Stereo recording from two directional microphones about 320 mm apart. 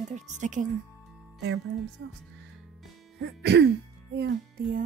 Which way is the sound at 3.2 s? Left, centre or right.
Right.